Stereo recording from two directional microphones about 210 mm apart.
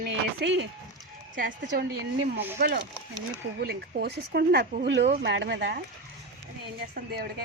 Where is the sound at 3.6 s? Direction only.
50° right (ahead or behind).